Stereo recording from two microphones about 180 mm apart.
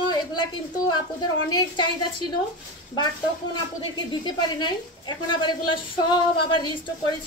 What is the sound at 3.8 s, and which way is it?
A woman's voice, 25° left (ahead or behind).